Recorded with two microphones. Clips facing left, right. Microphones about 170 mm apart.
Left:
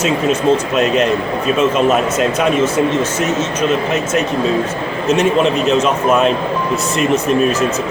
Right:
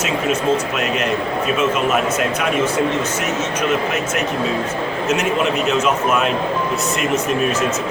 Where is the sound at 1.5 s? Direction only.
30° left (ahead or behind).